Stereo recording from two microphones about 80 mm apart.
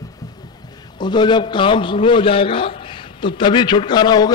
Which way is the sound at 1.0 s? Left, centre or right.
Left.